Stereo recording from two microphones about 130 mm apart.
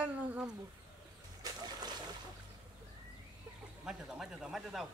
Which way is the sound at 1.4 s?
35° right (ahead or behind).